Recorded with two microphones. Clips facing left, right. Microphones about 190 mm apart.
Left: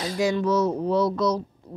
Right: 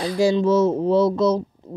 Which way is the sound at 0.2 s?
30° right (ahead or behind).